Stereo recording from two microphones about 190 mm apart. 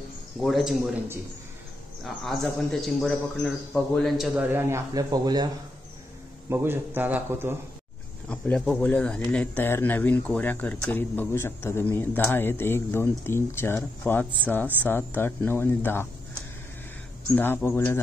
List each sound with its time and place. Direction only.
0.4 s a man's voice: centre (ahead or behind)
4.4 s a man's voice: 10° right (ahead or behind)
6.5 s a man's voice: 10° right (ahead or behind)
8.3 s speech: 5° left (ahead or behind)
17.4 s speech: 10° left (ahead or behind)